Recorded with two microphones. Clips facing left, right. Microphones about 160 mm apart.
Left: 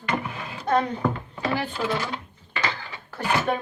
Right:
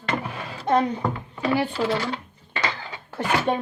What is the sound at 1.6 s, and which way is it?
Speech, 35° right (ahead or behind).